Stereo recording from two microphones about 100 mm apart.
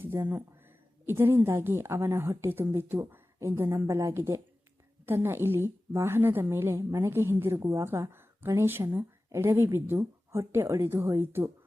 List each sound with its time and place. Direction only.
0.0 s a woman's voice: 25° right (ahead or behind)